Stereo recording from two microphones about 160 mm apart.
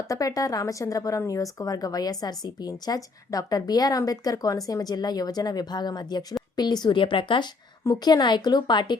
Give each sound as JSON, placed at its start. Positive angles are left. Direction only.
{"t": 0.1, "sound": "a woman's voice", "side_deg": 20}